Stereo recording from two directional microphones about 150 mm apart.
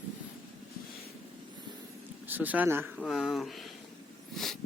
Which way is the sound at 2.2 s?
10° right (ahead or behind).